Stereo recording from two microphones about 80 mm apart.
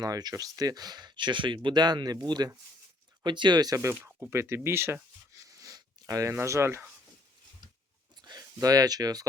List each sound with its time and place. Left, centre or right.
0.0 s speech: right
3.8 s speech: right
4.3 s a sound: right
6.3 s speech: right
8.2 s speech: right